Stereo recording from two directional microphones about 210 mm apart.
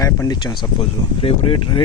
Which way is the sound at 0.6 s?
25° left (ahead or behind).